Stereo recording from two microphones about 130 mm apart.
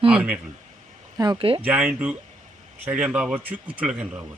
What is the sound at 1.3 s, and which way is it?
Speech, 45° right (ahead or behind).